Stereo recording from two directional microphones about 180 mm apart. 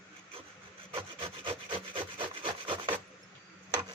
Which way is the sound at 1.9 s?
30° right (ahead or behind).